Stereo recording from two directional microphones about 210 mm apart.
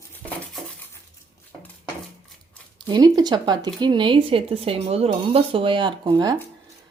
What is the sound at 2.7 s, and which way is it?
A woman's voice, 20° right (ahead or behind).